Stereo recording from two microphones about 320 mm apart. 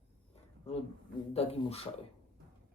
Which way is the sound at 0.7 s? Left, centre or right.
Centre.